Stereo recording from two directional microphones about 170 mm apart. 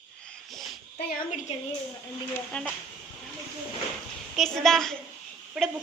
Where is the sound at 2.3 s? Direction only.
10° left (ahead or behind).